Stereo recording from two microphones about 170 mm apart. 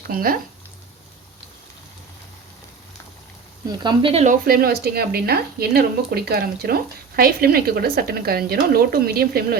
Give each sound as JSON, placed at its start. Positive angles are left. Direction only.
{"t": 0.1, "sound": "a woman's voice", "side_deg": -60}
{"t": 3.7, "sound": "speech", "side_deg": -30}
{"t": 4.4, "sound": "a woman's voice", "side_deg": -60}